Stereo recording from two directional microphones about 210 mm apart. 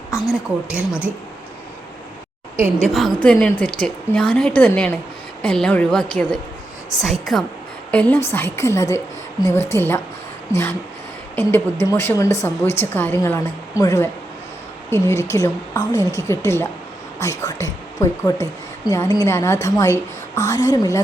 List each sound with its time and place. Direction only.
0.3 s a woman's voice: 5° right (ahead or behind)
2.9 s a woman's voice: 5° left (ahead or behind)